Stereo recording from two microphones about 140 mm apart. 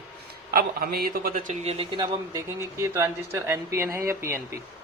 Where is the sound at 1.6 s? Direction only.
45° right (ahead or behind).